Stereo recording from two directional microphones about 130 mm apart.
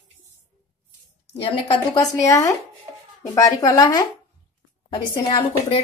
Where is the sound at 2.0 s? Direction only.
25° left (ahead or behind).